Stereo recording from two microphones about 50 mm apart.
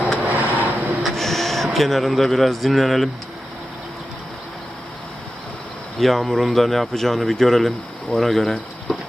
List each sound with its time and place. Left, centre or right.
0.2 s a sound: right
1.0 s speech: centre
6.0 s speech: centre